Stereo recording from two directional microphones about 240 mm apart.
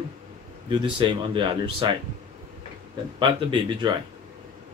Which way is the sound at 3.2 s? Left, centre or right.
Right.